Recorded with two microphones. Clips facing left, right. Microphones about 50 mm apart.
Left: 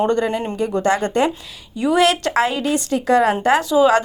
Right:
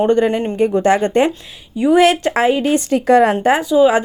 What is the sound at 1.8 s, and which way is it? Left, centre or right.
A woman's voice, right.